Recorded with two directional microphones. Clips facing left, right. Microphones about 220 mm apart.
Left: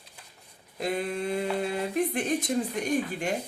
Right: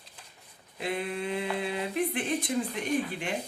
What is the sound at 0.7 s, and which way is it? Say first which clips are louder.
A woman's voice: left 3 dB; 40° left (ahead or behind).